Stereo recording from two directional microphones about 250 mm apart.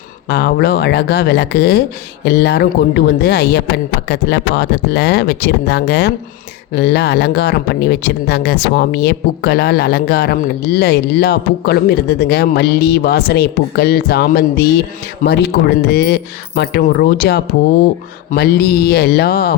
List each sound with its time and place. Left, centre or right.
0.3 s speech: left